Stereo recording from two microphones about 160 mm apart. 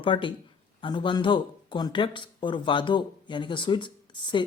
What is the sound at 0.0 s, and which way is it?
Speech, 30° left (ahead or behind).